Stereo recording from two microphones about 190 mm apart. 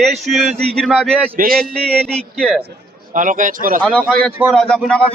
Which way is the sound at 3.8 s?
5° left (ahead or behind).